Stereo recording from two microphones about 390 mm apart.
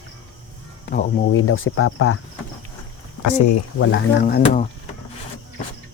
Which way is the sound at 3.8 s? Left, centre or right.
Left.